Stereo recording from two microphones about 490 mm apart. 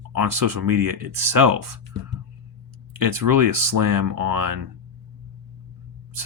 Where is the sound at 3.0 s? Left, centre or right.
Right.